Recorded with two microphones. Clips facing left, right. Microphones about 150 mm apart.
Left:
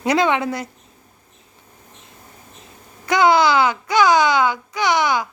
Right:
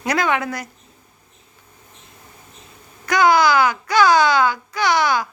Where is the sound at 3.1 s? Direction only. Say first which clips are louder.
Even; 25° left (ahead or behind).